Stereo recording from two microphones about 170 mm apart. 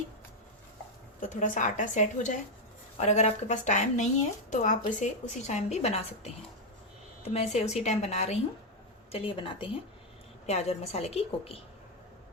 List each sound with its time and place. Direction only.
1.3 s a woman's voice: 50° left (ahead or behind)